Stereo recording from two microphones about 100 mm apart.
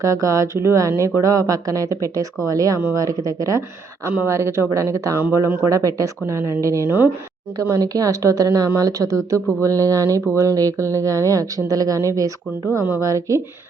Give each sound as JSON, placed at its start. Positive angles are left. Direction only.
{"t": 0.0, "sound": "speech", "side_deg": -30}